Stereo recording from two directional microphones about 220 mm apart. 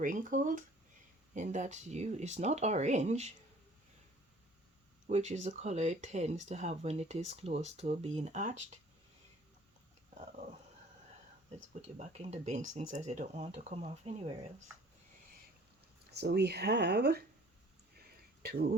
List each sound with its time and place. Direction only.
0.0 s speech: 35° right (ahead or behind)
5.0 s speech: 30° right (ahead or behind)
11.7 s speech: 30° right (ahead or behind)
16.1 s speech: 45° right (ahead or behind)